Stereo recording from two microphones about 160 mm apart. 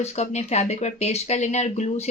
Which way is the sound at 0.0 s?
40° left (ahead or behind).